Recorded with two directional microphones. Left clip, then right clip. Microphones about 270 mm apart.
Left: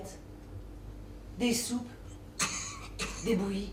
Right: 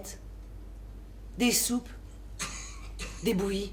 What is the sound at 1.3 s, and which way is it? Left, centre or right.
Speech, right.